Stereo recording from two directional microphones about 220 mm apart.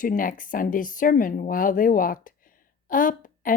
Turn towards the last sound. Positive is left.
turn(degrees=40)  # may be behind; listen again after turning